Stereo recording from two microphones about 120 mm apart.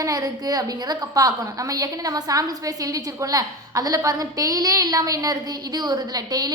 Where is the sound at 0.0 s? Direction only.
30° right (ahead or behind).